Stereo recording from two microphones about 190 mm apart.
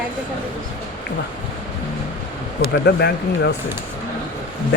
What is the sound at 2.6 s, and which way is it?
Speech, 60° left (ahead or behind).